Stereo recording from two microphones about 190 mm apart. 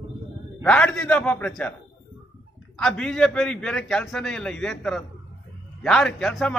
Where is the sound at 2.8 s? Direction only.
5° left (ahead or behind).